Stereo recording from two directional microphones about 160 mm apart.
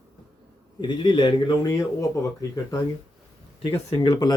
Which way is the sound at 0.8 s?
30° left (ahead or behind).